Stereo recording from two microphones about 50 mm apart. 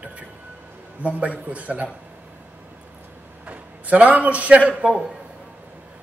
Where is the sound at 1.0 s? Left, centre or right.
Right.